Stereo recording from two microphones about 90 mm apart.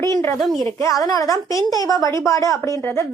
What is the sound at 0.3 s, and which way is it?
Speech, centre (ahead or behind).